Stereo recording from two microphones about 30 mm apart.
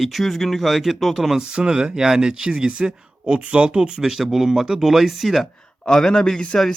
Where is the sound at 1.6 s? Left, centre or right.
Centre.